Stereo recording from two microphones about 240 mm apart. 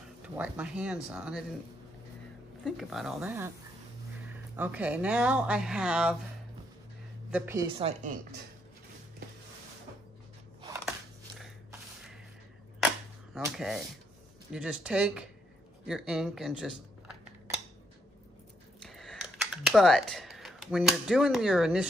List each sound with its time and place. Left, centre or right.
0.2 s speech: centre
2.6 s speech: centre
7.2 s a woman's voice: centre
7.7 s speech: right
13.3 s speech: centre
18.8 s a sound: centre